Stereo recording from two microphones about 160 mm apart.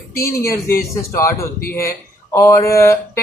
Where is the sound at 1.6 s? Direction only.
65° left (ahead or behind).